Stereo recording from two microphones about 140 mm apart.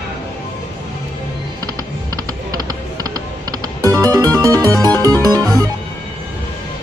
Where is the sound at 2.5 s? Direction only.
25° right (ahead or behind).